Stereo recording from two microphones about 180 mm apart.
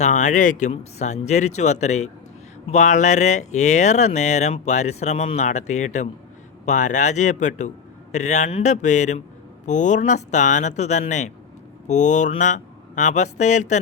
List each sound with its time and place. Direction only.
0.0 s speech: 40° left (ahead or behind)